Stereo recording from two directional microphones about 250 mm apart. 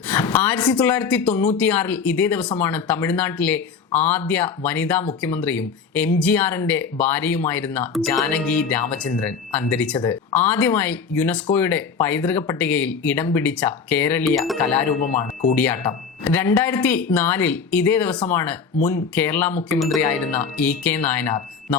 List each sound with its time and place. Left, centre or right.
0.1 s speech: centre
15.0 s speech: left
15.5 s speech: centre